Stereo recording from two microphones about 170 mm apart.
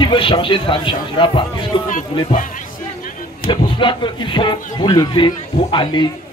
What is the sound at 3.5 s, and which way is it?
Speech, 30° left (ahead or behind).